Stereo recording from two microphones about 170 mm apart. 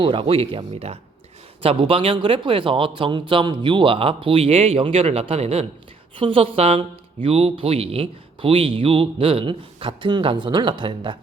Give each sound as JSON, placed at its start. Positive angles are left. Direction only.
{"t": 0.0, "sound": "speech", "side_deg": -30}